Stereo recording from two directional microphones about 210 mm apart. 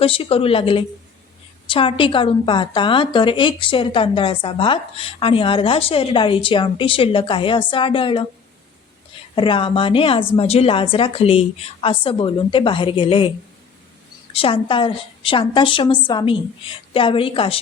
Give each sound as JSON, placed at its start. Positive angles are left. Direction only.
{"t": 0.0, "sound": "a woman's voice", "side_deg": 25}
{"t": 9.3, "sound": "a woman's voice", "side_deg": 25}
{"t": 14.3, "sound": "a woman's voice", "side_deg": 25}